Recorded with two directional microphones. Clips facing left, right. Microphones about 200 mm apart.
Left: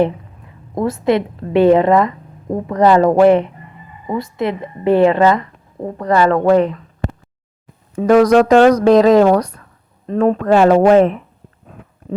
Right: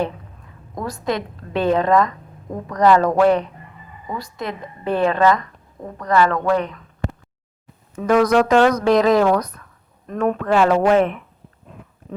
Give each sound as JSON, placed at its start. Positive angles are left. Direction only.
{"t": 1.0, "sound": "a woman's voice", "side_deg": 25}